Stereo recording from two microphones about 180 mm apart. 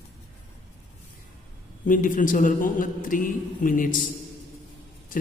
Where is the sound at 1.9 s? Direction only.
45° left (ahead or behind).